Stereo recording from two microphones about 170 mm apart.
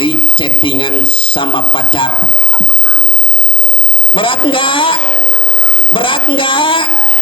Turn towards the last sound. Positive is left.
turn(degrees=30)  # may be behind; listen again after turning